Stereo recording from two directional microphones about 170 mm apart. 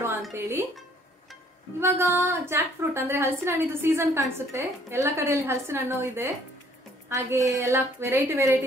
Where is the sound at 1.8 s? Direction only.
15° right (ahead or behind).